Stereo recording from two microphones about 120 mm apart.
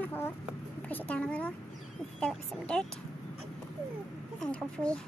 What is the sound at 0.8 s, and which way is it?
A woman's voice, 10° left (ahead or behind).